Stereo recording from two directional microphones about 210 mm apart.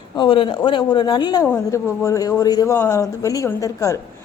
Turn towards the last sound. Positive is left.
turn(degrees=15)  # may be behind; listen again after turning